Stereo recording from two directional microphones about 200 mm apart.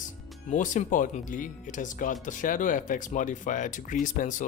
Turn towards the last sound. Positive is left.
turn(degrees=40)  # may be behind; listen again after turning